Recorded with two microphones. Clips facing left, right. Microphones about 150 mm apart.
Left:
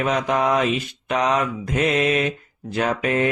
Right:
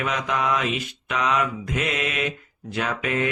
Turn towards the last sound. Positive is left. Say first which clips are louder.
# left 4 dB
turn(degrees=35)  # may be behind; listen again after turning